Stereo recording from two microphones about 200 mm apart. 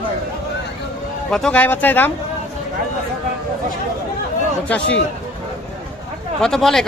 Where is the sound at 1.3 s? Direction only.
5° left (ahead or behind).